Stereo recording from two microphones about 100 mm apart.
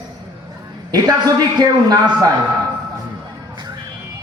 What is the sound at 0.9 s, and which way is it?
A woman's voice, 40° right (ahead or behind).